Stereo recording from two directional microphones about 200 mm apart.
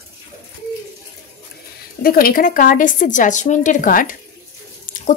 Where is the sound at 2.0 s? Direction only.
45° left (ahead or behind).